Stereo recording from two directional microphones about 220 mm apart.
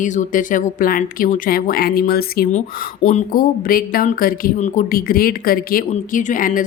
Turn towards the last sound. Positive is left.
turn(degrees=40)  # may be behind; listen again after turning